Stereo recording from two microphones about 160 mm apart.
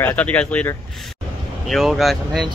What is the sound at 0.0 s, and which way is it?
Speech, 10° left (ahead or behind).